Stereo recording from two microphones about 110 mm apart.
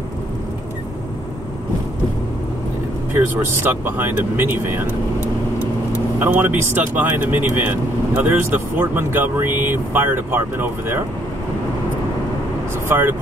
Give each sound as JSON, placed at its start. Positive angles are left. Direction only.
{"t": 3.3, "sound": "speech", "side_deg": -20}
{"t": 6.1, "sound": "speech", "side_deg": -15}
{"t": 12.8, "sound": "speech", "side_deg": -20}